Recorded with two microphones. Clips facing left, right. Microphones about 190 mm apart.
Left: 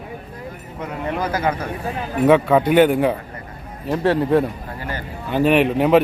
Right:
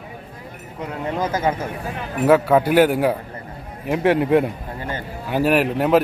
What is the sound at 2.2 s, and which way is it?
A man's voice, 5° right (ahead or behind).